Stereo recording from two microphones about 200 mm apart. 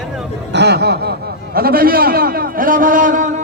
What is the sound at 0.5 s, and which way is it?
Speech, 55° right (ahead or behind).